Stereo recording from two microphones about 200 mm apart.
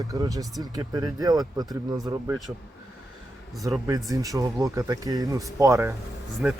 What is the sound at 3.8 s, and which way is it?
Speech, 15° right (ahead or behind).